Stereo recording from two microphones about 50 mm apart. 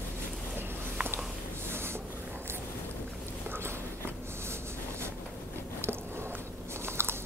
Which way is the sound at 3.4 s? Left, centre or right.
Right.